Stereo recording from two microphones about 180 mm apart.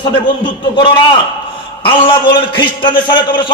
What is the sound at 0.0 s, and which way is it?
A man's voice, 25° left (ahead or behind).